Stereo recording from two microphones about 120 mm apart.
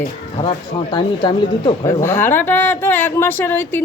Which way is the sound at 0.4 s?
40° left (ahead or behind).